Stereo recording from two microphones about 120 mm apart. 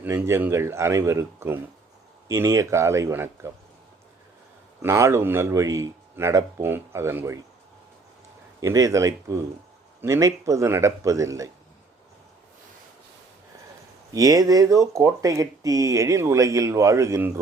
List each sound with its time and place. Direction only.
0.0 s speech: 15° right (ahead or behind)
4.8 s speech: 25° right (ahead or behind)
8.6 s speech: 25° right (ahead or behind)
14.1 s speech: 30° right (ahead or behind)